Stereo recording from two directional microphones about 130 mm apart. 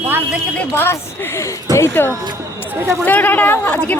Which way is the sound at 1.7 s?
20° left (ahead or behind).